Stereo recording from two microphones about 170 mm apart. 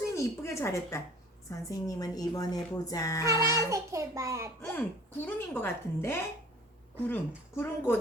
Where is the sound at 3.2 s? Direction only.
20° right (ahead or behind).